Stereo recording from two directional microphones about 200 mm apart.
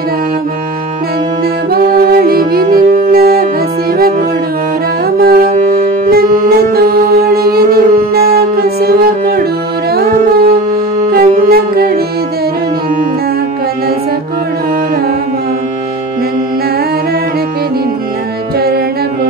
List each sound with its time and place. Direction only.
1.7 s music: 50° right (ahead or behind)
5.0 s music: 50° right (ahead or behind)